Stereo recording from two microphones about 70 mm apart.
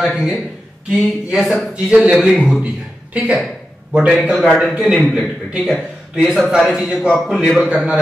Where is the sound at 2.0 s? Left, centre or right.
Centre.